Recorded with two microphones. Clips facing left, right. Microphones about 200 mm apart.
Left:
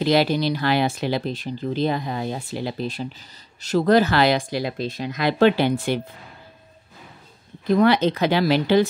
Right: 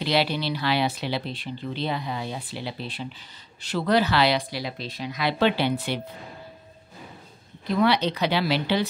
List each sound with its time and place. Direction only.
0.0 s speech: 45° left (ahead or behind)
7.6 s speech: 45° left (ahead or behind)